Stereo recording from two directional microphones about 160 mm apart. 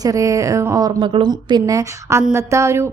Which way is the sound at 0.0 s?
20° right (ahead or behind).